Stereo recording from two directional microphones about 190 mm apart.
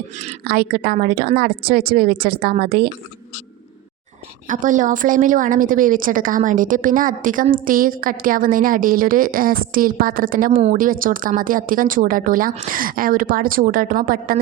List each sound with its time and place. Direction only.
0.1 s a woman's voice: 35° right (ahead or behind)
0.4 s a woman's voice: 55° right (ahead or behind)
4.4 s a woman's voice: 40° right (ahead or behind)